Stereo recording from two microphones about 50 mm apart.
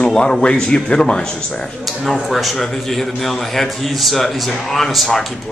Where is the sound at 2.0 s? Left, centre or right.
Centre.